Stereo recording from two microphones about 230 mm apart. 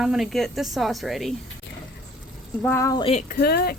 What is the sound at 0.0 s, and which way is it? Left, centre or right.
Speech, centre.